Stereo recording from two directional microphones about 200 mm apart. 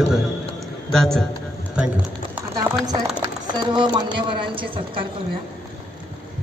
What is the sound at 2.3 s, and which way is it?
Clip-clop, 15° right (ahead or behind).